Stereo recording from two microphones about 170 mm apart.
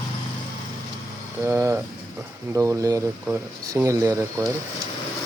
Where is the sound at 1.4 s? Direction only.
15° right (ahead or behind).